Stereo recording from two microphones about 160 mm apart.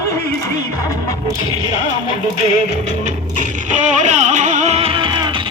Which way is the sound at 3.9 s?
50° right (ahead or behind).